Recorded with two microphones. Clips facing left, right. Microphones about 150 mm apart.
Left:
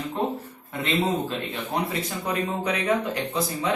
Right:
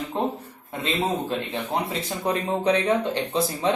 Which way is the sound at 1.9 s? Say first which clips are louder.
Right 2 dB; 30° right (ahead or behind).